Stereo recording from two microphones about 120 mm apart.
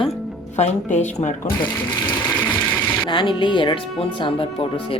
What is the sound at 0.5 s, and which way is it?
Speech, 70° left (ahead or behind).